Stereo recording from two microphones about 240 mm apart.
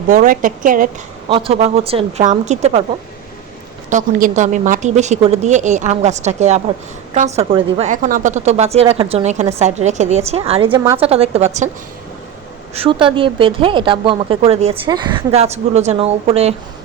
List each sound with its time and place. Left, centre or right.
0.1 s a woman's voice: right
1.3 s a woman's voice: right
3.8 s a woman's voice: right
12.7 s a woman's voice: right